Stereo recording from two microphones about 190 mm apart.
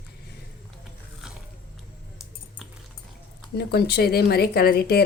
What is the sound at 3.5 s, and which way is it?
Speech, 55° left (ahead or behind).